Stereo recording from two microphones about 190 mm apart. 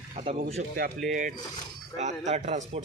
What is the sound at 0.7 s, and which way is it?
A man's voice, 50° right (ahead or behind).